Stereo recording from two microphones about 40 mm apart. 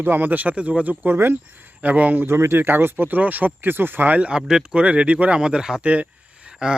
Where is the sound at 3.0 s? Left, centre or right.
Right.